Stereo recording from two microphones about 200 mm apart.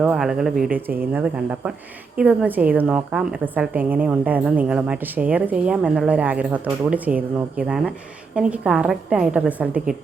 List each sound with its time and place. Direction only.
0.0 s a woman's voice: centre (ahead or behind)